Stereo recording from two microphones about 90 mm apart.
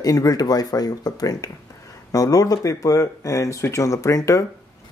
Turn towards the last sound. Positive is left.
turn(degrees=35)  # may be behind; listen again after turning